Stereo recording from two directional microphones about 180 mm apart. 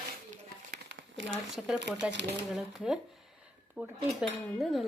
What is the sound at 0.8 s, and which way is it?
Crumpling, 85° right.